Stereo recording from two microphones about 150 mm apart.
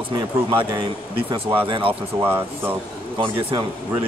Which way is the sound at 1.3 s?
35° right (ahead or behind).